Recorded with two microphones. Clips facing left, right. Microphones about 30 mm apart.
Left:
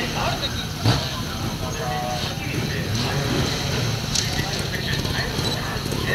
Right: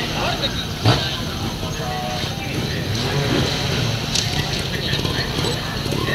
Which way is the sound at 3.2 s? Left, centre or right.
Centre.